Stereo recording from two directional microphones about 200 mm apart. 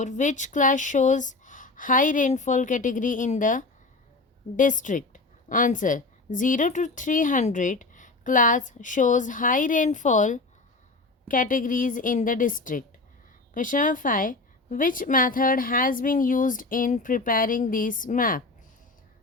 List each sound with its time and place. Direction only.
0.0 s a woman's voice: 40° left (ahead or behind)